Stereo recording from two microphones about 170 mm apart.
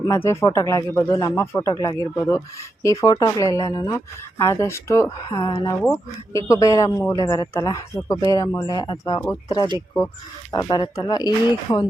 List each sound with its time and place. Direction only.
0.0 s speech: 15° left (ahead or behind)
10.5 s speech: 25° left (ahead or behind)